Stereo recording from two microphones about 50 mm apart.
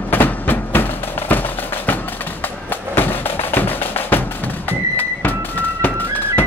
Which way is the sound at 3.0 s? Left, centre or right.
Left.